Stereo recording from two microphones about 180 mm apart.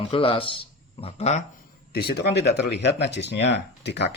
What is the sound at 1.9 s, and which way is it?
Speech, 60° left (ahead or behind).